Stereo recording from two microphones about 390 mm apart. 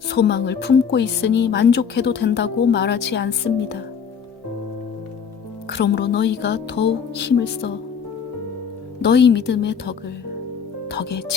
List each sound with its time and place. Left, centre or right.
0.1 s speech: left
5.6 s speech: left
9.0 s speech: left